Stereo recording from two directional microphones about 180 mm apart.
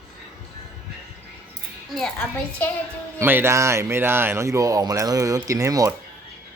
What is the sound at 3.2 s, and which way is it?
Speech, 15° right (ahead or behind).